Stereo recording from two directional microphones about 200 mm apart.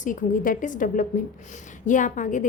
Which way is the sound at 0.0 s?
40° left (ahead or behind).